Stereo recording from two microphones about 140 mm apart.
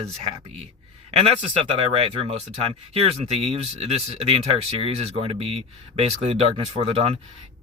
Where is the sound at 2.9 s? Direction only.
45° right (ahead or behind).